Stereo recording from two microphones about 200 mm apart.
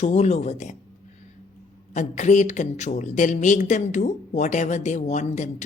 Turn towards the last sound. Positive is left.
turn(degrees=35)  # may be behind; listen again after turning